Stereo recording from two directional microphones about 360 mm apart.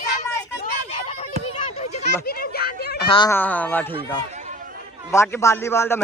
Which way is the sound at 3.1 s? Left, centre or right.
Centre.